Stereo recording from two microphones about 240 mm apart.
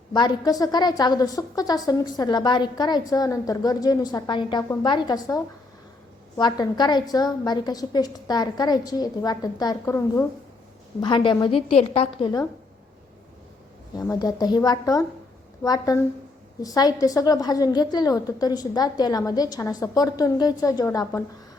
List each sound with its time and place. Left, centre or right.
0.1 s a woman's voice: centre
14.1 s a woman's voice: centre